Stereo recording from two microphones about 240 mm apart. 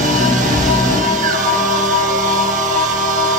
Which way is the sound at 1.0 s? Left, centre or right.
Right.